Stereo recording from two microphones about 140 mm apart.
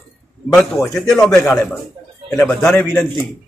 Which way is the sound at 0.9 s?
5° left (ahead or behind).